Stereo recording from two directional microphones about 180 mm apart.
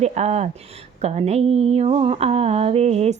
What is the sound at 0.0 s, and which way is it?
Speech, 40° right (ahead or behind).